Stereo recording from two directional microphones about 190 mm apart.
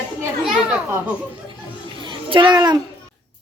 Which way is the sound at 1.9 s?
25° right (ahead or behind).